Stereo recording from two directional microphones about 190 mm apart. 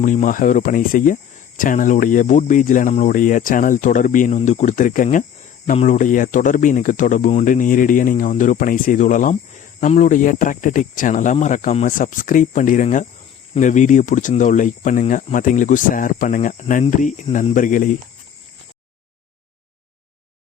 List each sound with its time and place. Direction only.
0.0 s speech: 45° left (ahead or behind)